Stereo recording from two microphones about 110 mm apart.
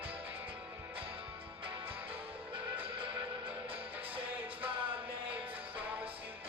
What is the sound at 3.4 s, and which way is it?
Music, 15° right (ahead or behind).